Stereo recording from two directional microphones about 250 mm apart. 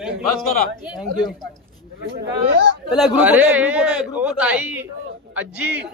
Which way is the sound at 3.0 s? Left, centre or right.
Centre.